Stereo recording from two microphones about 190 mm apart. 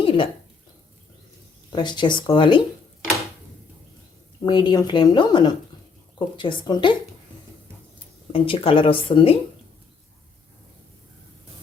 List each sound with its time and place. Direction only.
0.0 s a sound: 25° left (ahead or behind)
1.7 s speech: 25° left (ahead or behind)
4.4 s speech: 25° left (ahead or behind)
8.3 s speech: 30° left (ahead or behind)